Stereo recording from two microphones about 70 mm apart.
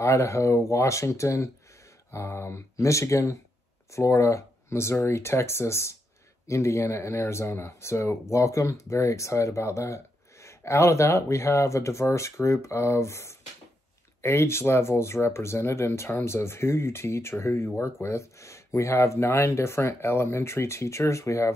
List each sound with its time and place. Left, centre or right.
0.0 s speech: left